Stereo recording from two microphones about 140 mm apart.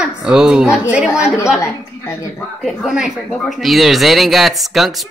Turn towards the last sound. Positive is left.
turn(degrees=0)  # may be behind; listen again after turning